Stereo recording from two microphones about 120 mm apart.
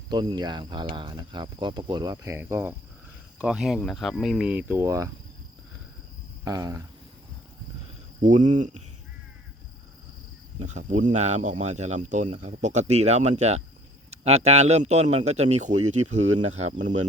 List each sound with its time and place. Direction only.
0.1 s speech: 40° right (ahead or behind)
2.2 s speech: 25° right (ahead or behind)
3.3 s speech: 5° right (ahead or behind)
4.8 s speech: 25° right (ahead or behind)
6.4 s speech: 30° right (ahead or behind)
8.2 s speech: 90° right
10.6 s speech: 80° right
12.3 s a man's voice: 75° right (ahead or behind)